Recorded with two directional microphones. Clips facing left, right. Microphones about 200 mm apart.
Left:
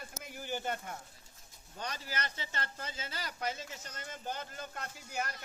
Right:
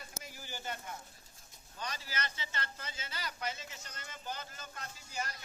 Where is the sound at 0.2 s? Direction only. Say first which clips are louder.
Left 9 dB; 55° left (ahead or behind).